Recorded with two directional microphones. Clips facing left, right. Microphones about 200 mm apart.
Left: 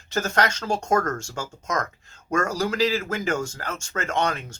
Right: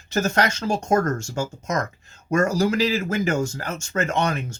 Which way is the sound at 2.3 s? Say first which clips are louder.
Right 4 dB; 5° right (ahead or behind).